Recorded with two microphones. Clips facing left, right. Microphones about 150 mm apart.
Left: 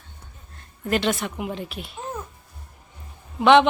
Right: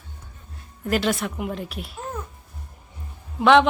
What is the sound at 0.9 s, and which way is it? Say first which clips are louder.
A woman's voice: even; centre (ahead or behind).